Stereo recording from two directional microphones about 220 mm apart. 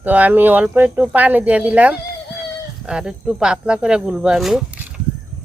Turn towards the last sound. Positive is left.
turn(degrees=-5)  # may be behind; listen again after turning